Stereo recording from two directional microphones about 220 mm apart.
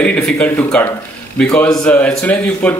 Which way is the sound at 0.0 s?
5° left (ahead or behind).